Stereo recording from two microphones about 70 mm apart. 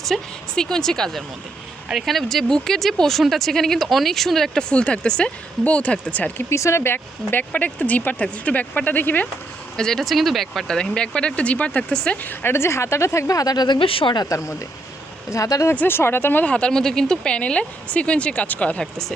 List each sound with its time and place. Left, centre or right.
0.0 s speech: centre
4.7 s speech: centre
6.5 s speech: left
9.7 s speech: centre
10.8 s speech: centre
12.2 s a woman's voice: left
14.3 s a woman's voice: left
15.7 s speech: left
16.5 s speech: centre